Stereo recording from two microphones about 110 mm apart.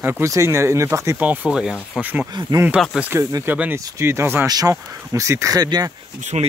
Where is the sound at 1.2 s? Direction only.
15° right (ahead or behind).